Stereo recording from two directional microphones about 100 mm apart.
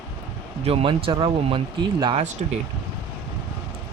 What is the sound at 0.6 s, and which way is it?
Speech, 70° right (ahead or behind).